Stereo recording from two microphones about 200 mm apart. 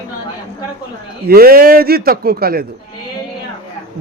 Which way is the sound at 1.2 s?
50° right (ahead or behind).